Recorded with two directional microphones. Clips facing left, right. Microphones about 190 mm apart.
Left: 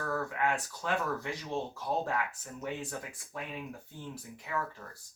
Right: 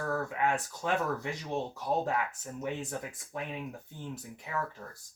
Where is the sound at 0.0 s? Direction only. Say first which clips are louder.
Right 1 dB; 20° right (ahead or behind).